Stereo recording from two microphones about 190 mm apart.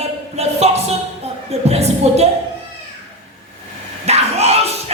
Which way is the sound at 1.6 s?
35° right (ahead or behind).